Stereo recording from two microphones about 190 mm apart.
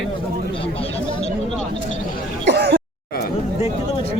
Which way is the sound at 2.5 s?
60° right (ahead or behind).